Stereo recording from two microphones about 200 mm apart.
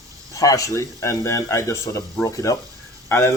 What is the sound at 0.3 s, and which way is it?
A man's voice, 15° left (ahead or behind).